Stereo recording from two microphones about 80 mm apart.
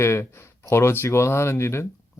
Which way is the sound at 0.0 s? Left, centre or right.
Left.